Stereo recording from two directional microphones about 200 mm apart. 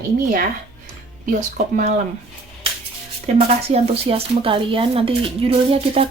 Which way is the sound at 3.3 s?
30° right (ahead or behind).